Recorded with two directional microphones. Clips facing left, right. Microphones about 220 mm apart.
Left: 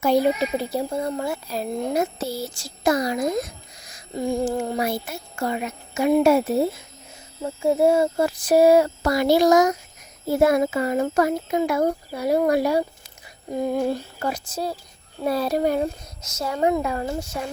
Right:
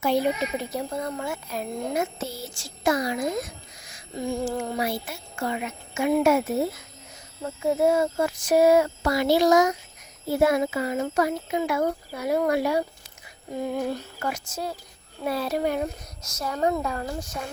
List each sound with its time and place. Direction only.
0.0 s a child's voice: 40° left (ahead or behind)
16.2 s speech: 25° left (ahead or behind)